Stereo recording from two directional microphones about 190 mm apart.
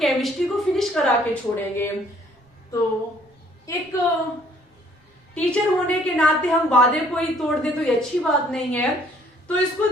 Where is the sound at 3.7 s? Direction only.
15° left (ahead or behind).